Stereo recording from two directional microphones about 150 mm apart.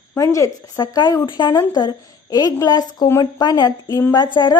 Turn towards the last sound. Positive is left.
turn(degrees=30)  # may be behind; listen again after turning